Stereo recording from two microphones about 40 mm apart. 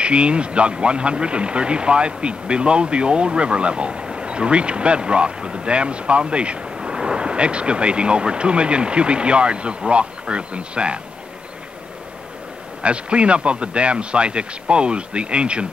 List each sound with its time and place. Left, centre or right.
0.0 s speech: right
12.8 s speech: right